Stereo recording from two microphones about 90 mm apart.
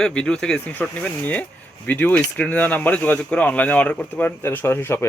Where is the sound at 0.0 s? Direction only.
10° left (ahead or behind).